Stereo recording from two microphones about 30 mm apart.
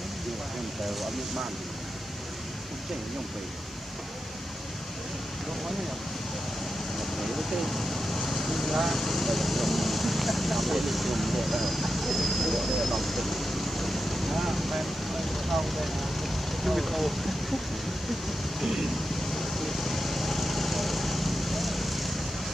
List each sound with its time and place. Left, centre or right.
7.0 s speech: centre
18.6 s a sound: centre
19.3 s vehicle: centre